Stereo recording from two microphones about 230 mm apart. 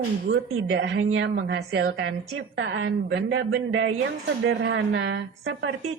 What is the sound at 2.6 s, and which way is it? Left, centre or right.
Speech, right.